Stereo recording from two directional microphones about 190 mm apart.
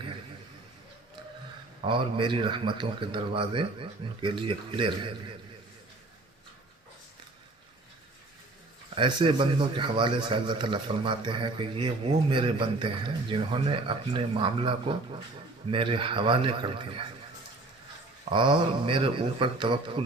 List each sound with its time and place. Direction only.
1.8 s a man's voice: 25° right (ahead or behind)
9.0 s a man's voice: 25° right (ahead or behind)
18.3 s a man's voice: 25° right (ahead or behind)